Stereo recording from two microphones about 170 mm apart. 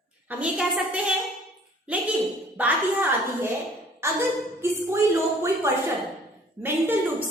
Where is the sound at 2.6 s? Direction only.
10° right (ahead or behind).